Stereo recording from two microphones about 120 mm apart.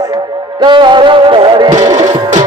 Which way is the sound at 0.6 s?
40° right (ahead or behind).